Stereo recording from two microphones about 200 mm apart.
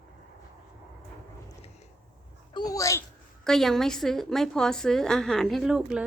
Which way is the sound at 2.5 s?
15° left (ahead or behind).